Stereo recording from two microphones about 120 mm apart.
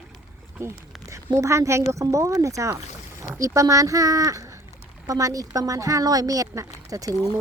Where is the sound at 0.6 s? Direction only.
20° right (ahead or behind).